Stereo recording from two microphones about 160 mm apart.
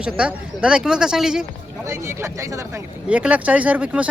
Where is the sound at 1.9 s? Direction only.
15° right (ahead or behind).